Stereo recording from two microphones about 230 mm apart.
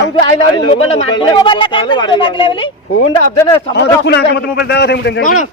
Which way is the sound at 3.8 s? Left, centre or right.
Left.